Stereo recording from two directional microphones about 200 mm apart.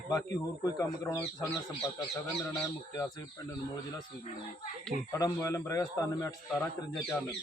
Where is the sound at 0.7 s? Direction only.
20° left (ahead or behind).